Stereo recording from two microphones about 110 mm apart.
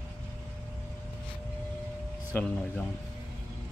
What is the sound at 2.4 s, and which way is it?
Speech, 15° left (ahead or behind).